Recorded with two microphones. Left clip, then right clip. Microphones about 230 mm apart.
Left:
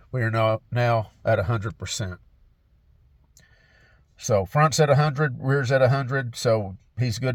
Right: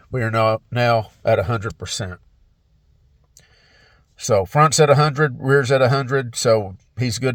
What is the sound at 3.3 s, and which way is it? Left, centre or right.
Speech, right.